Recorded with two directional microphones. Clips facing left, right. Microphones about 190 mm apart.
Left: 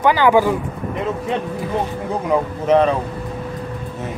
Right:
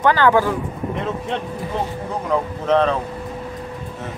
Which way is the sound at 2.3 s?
10° left (ahead or behind).